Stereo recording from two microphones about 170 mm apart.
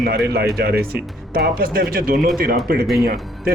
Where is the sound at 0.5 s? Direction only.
70° right (ahead or behind).